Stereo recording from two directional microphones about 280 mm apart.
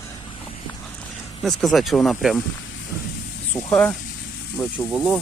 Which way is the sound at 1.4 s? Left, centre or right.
Centre.